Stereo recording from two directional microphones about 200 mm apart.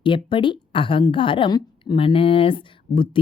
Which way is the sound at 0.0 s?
25° left (ahead or behind).